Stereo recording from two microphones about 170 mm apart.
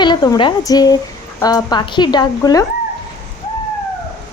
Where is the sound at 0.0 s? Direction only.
25° left (ahead or behind).